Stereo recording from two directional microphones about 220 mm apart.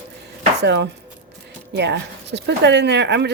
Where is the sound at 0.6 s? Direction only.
50° right (ahead or behind).